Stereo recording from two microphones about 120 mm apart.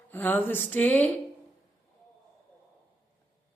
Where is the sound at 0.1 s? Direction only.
15° left (ahead or behind).